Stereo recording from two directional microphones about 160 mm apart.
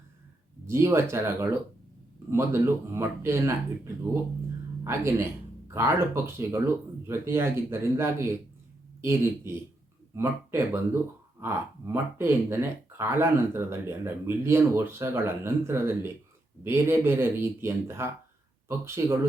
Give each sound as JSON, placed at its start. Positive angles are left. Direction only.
{"t": 0.7, "sound": "speech", "side_deg": -15}
{"t": 4.8, "sound": "speech", "side_deg": -20}